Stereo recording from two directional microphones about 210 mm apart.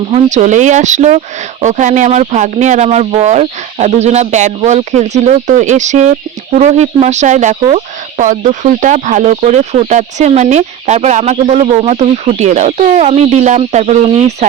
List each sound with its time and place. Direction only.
0.1 s speech: 35° right (ahead or behind)